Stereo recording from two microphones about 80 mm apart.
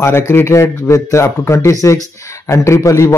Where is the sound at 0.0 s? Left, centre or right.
Left.